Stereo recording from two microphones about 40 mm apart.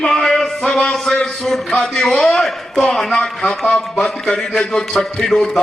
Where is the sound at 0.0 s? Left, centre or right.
Centre.